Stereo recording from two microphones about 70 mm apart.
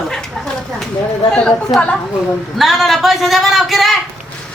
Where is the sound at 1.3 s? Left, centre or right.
Centre.